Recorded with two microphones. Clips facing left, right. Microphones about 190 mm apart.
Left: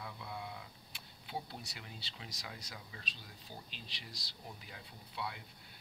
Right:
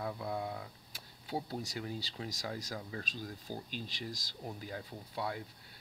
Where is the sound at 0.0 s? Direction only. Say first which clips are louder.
Right 8 dB; 40° right (ahead or behind).